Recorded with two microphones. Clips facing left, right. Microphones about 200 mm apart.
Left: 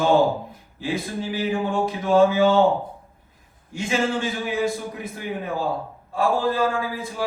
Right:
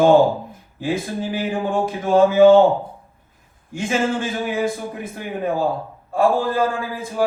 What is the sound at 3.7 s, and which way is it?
Speech, 50° right (ahead or behind).